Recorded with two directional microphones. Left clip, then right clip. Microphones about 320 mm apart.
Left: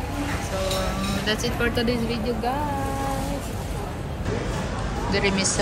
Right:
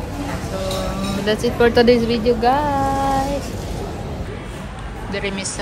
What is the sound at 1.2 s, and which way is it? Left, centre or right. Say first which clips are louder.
Speech: right 10 dB; centre.